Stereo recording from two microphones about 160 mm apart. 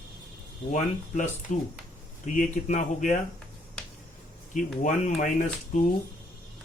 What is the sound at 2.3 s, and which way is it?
Speech, 50° left (ahead or behind).